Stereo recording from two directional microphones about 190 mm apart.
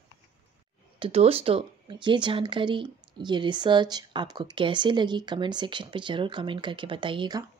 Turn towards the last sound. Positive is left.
turn(degrees=-25)  # may be behind; listen again after turning